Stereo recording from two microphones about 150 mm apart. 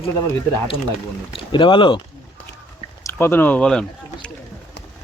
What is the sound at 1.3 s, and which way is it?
Speech, 35° left (ahead or behind).